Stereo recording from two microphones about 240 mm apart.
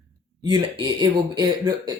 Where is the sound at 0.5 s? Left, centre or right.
Centre.